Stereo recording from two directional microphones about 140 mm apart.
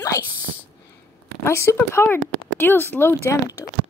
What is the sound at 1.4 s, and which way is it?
A woman's voice, 20° left (ahead or behind).